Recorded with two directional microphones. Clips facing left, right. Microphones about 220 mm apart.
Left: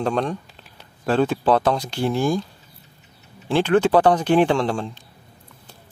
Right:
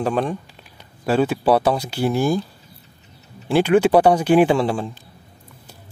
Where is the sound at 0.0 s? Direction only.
5° right (ahead or behind).